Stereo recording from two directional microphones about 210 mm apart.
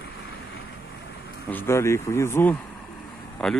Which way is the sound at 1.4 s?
10° left (ahead or behind).